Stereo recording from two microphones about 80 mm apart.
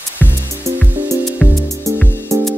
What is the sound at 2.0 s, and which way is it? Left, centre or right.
Music, left.